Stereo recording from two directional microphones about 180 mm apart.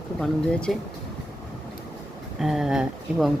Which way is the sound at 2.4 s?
Centre (ahead or behind).